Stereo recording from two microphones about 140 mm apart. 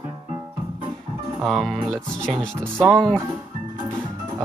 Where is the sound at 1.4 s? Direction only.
Centre (ahead or behind).